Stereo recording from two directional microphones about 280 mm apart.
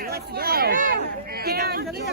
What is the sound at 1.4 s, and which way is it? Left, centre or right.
Speech, right.